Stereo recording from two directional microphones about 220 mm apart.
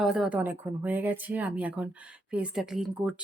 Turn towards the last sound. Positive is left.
turn(degrees=-5)  # may be behind; listen again after turning